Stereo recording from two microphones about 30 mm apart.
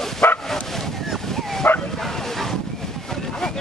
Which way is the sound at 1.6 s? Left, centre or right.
Left.